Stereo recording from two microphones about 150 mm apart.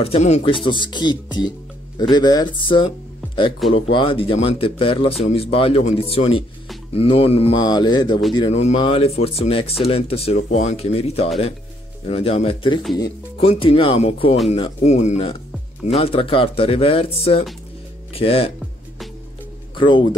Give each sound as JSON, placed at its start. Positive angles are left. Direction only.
{"t": 0.0, "sound": "speech", "side_deg": 45}
{"t": 0.7, "sound": "speech", "side_deg": 30}
{"t": 7.6, "sound": "speech", "side_deg": 30}
{"t": 8.5, "sound": "speech", "side_deg": 45}
{"t": 19.7, "sound": "speech", "side_deg": 35}